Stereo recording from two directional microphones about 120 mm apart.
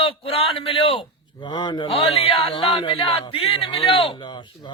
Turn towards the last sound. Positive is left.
turn(degrees=40)  # may be behind; listen again after turning